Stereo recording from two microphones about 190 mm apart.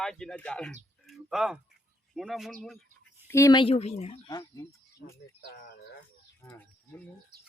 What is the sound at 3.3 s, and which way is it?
Speech, 15° left (ahead or behind).